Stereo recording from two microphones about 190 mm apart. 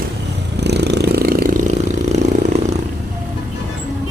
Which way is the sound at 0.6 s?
65° right (ahead or behind).